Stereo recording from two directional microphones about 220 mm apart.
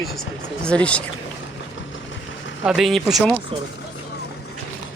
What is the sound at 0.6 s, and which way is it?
Speech, 5° left (ahead or behind).